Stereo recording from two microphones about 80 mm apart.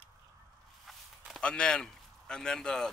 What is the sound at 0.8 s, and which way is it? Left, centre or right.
Walk, centre.